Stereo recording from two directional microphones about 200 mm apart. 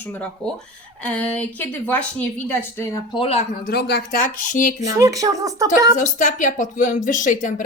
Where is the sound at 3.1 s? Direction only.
30° left (ahead or behind).